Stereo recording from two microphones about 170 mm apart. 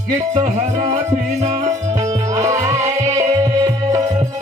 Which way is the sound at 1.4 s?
40° right (ahead or behind).